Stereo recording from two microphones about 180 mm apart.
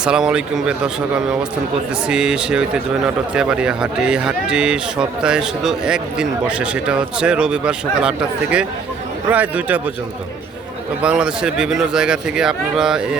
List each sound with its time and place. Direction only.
0.0 s speech: 5° right (ahead or behind)
11.0 s speech: 5° right (ahead or behind)